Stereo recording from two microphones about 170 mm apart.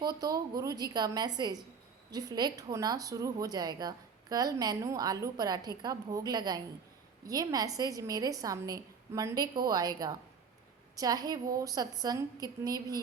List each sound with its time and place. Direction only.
0.0 s speech: 25° right (ahead or behind)